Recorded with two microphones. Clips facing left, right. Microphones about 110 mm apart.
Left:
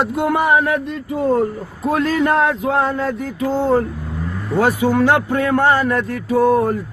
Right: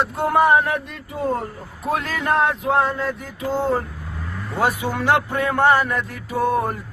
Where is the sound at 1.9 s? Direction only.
35° left (ahead or behind).